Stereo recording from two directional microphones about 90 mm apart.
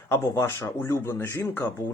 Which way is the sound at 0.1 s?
30° left (ahead or behind).